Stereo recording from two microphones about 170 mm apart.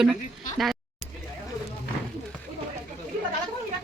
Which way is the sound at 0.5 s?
Centre (ahead or behind).